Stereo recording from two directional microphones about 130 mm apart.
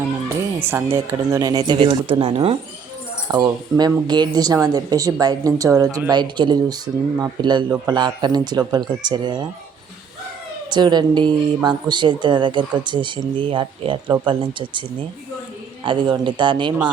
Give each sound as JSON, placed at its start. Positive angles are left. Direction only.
{"t": 0.6, "sound": "speech", "side_deg": -15}
{"t": 3.3, "sound": "speech", "side_deg": -30}
{"t": 10.7, "sound": "speech", "side_deg": -35}